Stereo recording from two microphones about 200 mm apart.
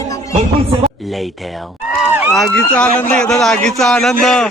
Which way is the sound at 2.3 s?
5° left (ahead or behind).